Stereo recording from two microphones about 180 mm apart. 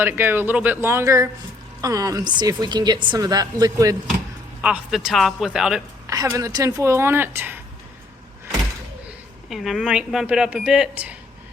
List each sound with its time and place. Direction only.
0.0 s a woman's voice: 10° right (ahead or behind)
4.6 s speech: 5° right (ahead or behind)
6.1 s speech: 20° right (ahead or behind)
9.5 s speech: centre (ahead or behind)